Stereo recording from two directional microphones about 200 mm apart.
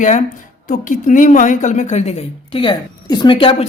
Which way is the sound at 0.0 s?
35° left (ahead or behind).